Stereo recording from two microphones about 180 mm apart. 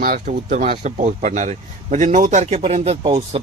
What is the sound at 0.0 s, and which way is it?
A man's voice, 50° right (ahead or behind).